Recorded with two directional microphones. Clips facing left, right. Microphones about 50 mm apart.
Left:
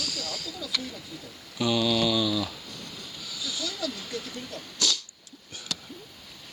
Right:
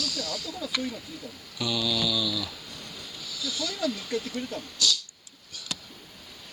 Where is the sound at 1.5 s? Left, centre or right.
Centre.